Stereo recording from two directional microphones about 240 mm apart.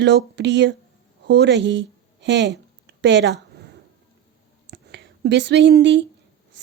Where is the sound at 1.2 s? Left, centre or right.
Right.